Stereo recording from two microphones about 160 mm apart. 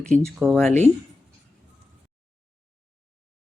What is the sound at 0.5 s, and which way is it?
Speech, 5° left (ahead or behind).